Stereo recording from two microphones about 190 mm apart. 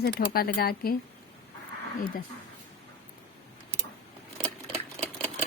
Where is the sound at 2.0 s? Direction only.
50° left (ahead or behind).